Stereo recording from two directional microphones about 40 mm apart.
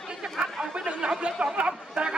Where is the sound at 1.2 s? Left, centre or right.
Right.